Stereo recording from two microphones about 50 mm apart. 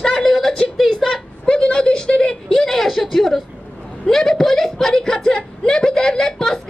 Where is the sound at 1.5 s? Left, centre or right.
Centre.